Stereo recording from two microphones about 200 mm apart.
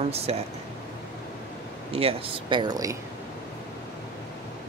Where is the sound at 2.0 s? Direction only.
25° right (ahead or behind).